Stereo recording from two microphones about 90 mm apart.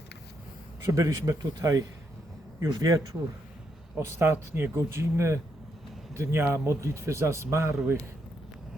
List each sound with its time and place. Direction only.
0.9 s speech: 35° right (ahead or behind)
3.9 s speech: 30° right (ahead or behind)